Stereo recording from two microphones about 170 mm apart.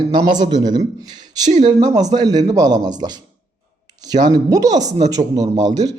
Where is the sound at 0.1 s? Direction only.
25° right (ahead or behind).